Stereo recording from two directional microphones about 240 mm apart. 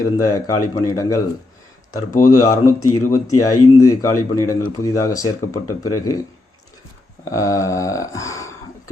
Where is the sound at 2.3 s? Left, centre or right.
Centre.